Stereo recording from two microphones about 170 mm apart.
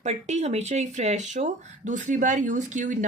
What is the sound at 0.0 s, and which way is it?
Speech, 40° right (ahead or behind).